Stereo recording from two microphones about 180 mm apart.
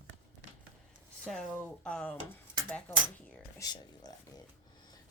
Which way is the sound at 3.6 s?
20° left (ahead or behind).